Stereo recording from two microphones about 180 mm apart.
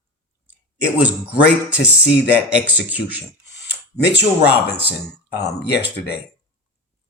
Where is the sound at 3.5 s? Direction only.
70° left (ahead or behind).